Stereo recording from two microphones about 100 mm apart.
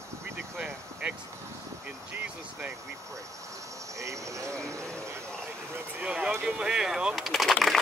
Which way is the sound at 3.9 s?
30° right (ahead or behind).